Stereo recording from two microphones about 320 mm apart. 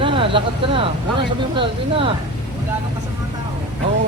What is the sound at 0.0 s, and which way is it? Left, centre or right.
Speech, centre.